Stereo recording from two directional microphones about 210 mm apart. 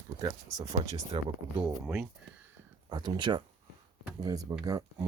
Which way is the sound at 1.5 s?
5° right (ahead or behind).